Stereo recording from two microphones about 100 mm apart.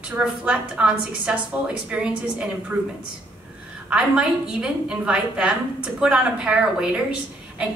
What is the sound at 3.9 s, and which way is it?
A woman's voice, 10° right (ahead or behind).